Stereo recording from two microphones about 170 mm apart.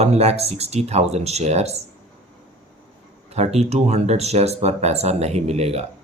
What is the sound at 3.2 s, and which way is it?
Speech, 40° right (ahead or behind).